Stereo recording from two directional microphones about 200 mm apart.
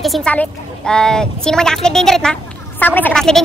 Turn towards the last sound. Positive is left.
turn(degrees=5)  # may be behind; listen again after turning